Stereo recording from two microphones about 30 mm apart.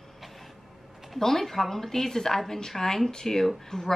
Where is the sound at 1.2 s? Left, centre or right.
Centre.